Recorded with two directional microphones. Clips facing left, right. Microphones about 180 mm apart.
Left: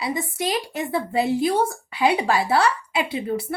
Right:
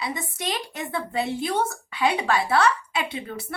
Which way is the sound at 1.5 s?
30° left (ahead or behind).